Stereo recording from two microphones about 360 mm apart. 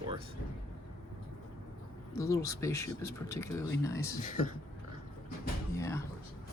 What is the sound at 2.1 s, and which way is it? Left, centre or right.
Speech, centre.